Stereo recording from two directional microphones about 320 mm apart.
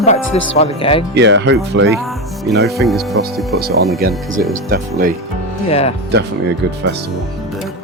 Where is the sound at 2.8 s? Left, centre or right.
Centre.